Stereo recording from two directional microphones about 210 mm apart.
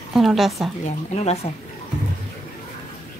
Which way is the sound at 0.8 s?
30° left (ahead or behind).